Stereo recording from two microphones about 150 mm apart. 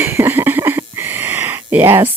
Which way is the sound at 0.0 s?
15° right (ahead or behind).